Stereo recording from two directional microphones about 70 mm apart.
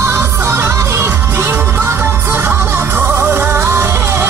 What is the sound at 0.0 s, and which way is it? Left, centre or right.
Music, right.